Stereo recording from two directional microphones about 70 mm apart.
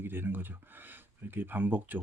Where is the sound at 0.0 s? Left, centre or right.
Right.